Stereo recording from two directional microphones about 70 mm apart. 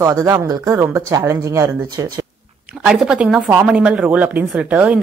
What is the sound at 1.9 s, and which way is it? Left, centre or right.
Speech, right.